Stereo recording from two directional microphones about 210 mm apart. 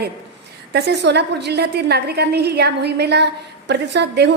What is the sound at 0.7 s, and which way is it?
A woman's voice, 50° right (ahead or behind).